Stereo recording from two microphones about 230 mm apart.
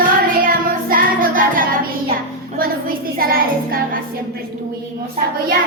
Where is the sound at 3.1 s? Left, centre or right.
Right.